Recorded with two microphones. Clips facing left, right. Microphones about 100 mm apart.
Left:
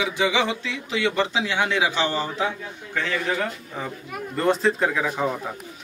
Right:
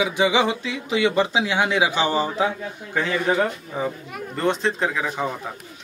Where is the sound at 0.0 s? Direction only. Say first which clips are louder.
Right 3 dB; 15° right (ahead or behind).